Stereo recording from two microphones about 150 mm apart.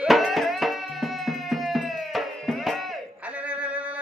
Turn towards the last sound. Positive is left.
turn(degrees=-10)  # may be behind; listen again after turning